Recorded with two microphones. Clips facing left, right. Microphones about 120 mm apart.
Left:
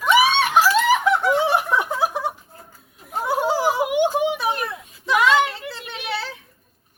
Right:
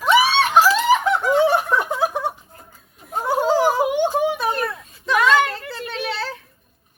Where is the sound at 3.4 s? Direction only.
15° left (ahead or behind).